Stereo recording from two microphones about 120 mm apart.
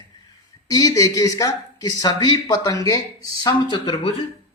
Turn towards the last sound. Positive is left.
turn(degrees=50)  # may be behind; listen again after turning